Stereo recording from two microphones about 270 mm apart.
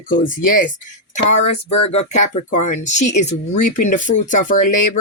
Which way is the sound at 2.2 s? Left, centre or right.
Left.